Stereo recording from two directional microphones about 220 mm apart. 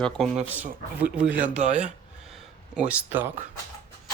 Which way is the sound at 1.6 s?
30° right (ahead or behind).